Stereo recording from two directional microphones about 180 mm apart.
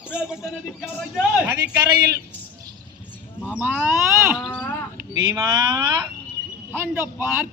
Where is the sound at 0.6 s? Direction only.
5° right (ahead or behind).